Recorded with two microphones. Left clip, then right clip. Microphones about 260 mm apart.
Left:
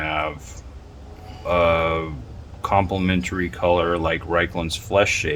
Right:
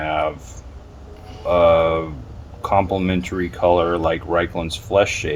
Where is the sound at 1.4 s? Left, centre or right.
Centre.